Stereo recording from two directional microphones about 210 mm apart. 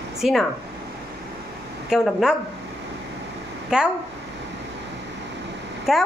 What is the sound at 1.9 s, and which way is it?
Speech, centre (ahead or behind).